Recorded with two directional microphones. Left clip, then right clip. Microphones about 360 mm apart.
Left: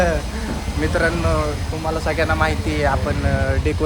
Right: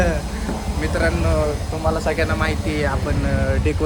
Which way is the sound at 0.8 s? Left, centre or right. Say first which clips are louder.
Left 2 dB; centre.